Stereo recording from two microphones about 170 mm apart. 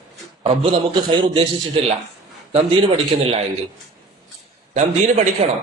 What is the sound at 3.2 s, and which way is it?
Speech, 35° right (ahead or behind).